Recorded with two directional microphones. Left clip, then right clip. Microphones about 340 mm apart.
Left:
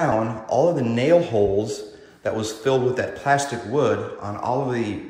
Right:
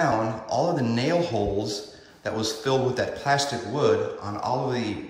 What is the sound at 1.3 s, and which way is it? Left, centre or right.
Speech, right.